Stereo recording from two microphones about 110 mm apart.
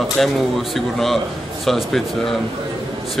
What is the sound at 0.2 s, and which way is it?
Speech, centre (ahead or behind).